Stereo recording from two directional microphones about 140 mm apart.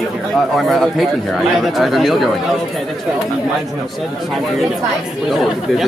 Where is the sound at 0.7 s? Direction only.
Centre (ahead or behind).